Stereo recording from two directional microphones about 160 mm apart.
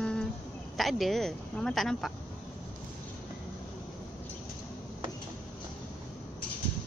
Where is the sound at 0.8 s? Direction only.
Centre (ahead or behind).